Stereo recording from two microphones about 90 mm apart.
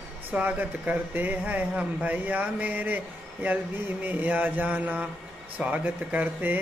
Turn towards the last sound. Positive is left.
turn(degrees=-20)  # may be behind; listen again after turning